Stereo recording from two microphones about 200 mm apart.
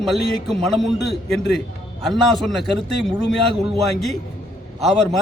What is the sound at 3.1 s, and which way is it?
Speech, 5° left (ahead or behind).